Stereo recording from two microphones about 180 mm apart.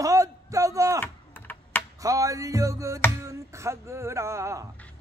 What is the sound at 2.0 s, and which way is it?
Music, 20° right (ahead or behind).